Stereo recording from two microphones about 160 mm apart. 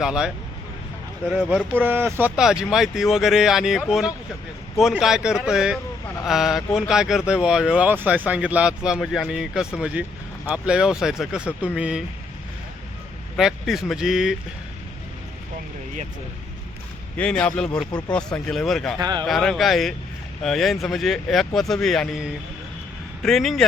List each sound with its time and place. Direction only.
0.0 s speech: 5° right (ahead or behind)
1.3 s speech: 5° right (ahead or behind)
13.3 s speech: centre (ahead or behind)
17.2 s speech: 5° left (ahead or behind)
18.9 s speech: 25° right (ahead or behind)
19.3 s speech: centre (ahead or behind)